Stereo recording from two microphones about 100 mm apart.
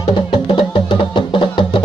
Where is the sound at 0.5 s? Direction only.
55° left (ahead or behind).